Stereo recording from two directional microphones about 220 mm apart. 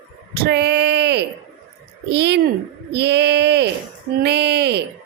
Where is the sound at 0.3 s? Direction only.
45° right (ahead or behind).